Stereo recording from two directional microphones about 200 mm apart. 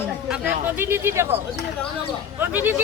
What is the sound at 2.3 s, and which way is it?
Speech, 10° right (ahead or behind).